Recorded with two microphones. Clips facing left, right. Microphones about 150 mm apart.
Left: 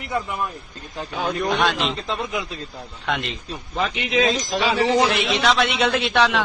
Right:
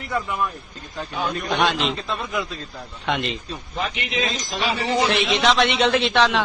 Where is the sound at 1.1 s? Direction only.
75° left (ahead or behind).